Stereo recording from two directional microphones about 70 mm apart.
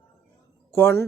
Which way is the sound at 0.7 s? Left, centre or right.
Left.